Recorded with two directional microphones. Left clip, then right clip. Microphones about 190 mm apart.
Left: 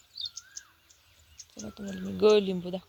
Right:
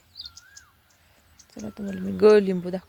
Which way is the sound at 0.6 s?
10° right (ahead or behind).